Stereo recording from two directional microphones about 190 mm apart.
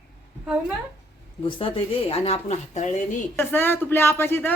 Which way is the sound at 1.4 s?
30° left (ahead or behind).